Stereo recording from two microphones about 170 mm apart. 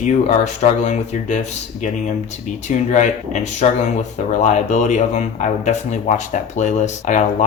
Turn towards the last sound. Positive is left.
turn(degrees=45)  # may be behind; listen again after turning